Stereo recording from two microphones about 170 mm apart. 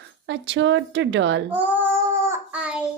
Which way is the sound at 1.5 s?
10° right (ahead or behind).